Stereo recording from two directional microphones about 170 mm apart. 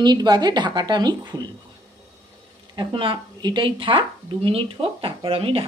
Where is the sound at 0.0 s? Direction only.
25° right (ahead or behind).